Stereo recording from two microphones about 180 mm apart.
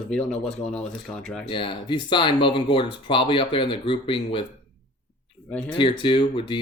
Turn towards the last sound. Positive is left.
turn(degrees=30)  # may be behind; listen again after turning